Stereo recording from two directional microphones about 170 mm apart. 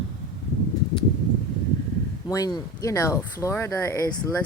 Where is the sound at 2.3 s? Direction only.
20° left (ahead or behind).